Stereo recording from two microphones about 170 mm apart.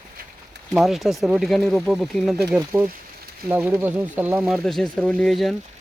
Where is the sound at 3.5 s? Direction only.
10° right (ahead or behind).